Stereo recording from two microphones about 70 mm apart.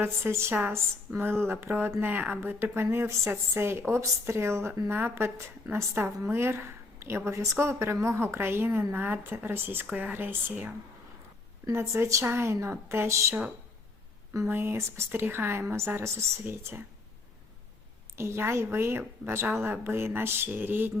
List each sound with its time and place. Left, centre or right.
0.0 s a woman's voice: right
11.9 s speech: right
12.2 s a woman's voice: right
14.4 s a woman's voice: right
18.2 s a woman's voice: right